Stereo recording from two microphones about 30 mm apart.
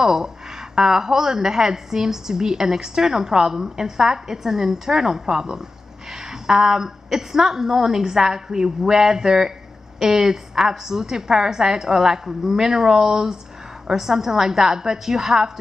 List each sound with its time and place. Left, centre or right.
0.0 s a woman's voice: centre